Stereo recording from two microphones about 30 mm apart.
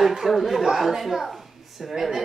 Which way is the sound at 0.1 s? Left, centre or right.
Centre.